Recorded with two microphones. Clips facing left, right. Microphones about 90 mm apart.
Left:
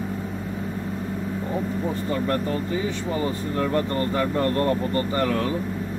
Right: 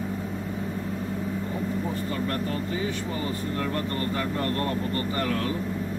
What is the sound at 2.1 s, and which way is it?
Speech, 25° left (ahead or behind).